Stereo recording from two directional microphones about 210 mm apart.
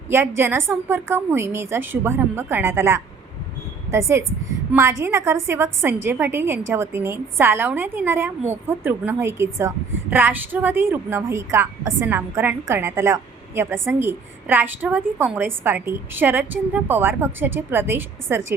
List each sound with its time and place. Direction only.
0.1 s a woman's voice: 10° right (ahead or behind)
4.7 s a woman's voice: 10° right (ahead or behind)